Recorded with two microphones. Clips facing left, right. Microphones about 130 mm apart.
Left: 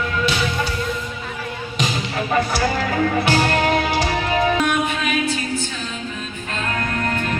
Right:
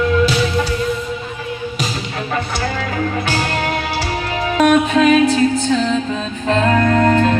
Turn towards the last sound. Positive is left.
turn(degrees=-90)